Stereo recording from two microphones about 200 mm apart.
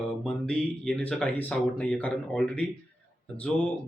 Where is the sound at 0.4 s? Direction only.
5° left (ahead or behind).